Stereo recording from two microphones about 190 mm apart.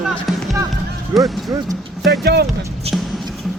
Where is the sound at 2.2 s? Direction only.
55° right (ahead or behind).